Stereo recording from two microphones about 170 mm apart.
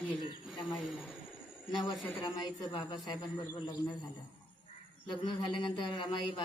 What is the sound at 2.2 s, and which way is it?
A man's voice, 25° left (ahead or behind).